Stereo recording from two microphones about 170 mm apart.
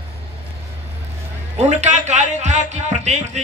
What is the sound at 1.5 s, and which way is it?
Speech, 40° right (ahead or behind).